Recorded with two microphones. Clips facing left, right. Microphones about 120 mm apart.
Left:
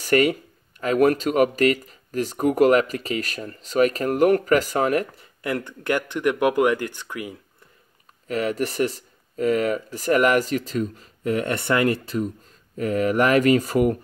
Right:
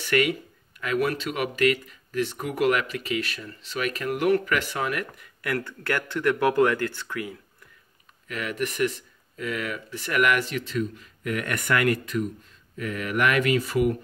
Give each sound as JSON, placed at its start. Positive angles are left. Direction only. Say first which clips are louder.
{"t": 0.0, "sound": "speech", "louder": "left 5 dB", "side_deg": 40}
{"t": 8.3, "sound": "speech", "louder": "left 6 dB", "side_deg": 35}